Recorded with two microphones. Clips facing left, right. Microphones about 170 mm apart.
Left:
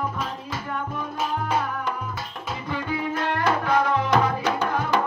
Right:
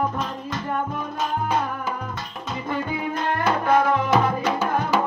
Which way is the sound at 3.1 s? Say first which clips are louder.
Right 1 dB; 5° left (ahead or behind).